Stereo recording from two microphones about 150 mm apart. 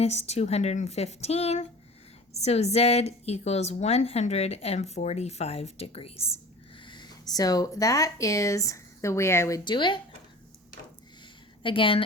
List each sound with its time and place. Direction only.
0.0 s a woman's voice: 45° left (ahead or behind); by 9.6 s 15° left (ahead or behind)
9.6 s a woman's voice: 30° left (ahead or behind)
11.6 s a woman's voice: 35° left (ahead or behind)